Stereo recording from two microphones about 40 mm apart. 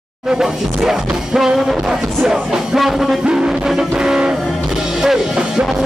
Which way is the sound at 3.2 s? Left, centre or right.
Right.